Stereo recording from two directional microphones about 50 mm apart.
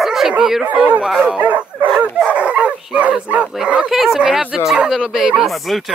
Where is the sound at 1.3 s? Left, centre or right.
Right.